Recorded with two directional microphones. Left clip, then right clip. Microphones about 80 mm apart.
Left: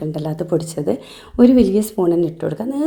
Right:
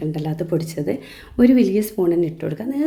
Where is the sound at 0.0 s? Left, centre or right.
Left.